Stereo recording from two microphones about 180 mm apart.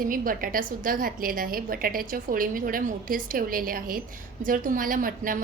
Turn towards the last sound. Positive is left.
turn(degrees=-50)  # may be behind; listen again after turning